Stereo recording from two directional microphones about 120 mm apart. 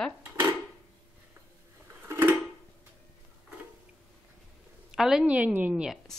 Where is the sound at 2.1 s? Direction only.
15° right (ahead or behind).